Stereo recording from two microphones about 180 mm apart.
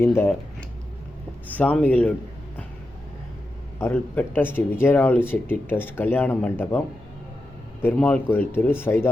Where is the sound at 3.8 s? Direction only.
10° left (ahead or behind).